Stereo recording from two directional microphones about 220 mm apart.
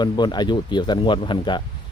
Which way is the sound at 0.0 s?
20° left (ahead or behind).